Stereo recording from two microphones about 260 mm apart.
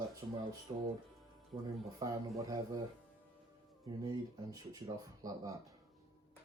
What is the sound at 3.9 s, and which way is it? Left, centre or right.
Speech, centre.